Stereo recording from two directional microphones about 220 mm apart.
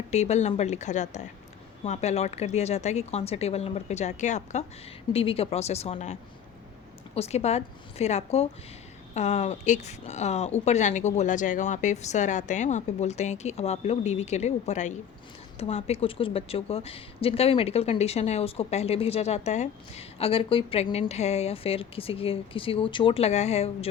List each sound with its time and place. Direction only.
0.1 s a woman's voice: 30° left (ahead or behind)